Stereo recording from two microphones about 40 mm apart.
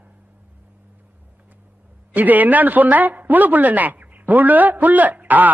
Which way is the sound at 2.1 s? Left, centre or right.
Right.